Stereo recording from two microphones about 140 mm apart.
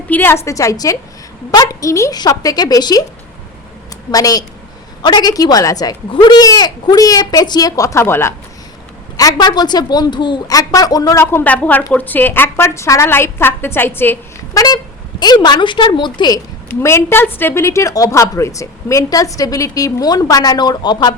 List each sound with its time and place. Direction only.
0.1 s a woman's voice: 15° left (ahead or behind)
4.1 s a woman's voice: 25° left (ahead or behind)
15.2 s a woman's voice: 30° left (ahead or behind)
16.6 s a woman's voice: 20° left (ahead or behind)